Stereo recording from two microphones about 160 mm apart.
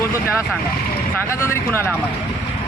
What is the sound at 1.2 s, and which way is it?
Speech, 15° left (ahead or behind).